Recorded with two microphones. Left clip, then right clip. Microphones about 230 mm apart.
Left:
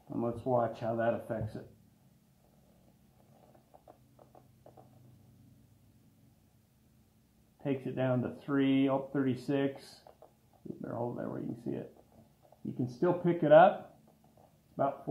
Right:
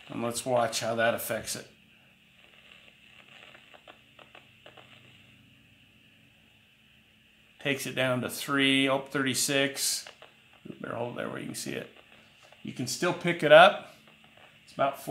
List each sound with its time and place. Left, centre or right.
0.1 s speech: right
3.8 s a sound: right
7.6 s speech: right
14.8 s speech: right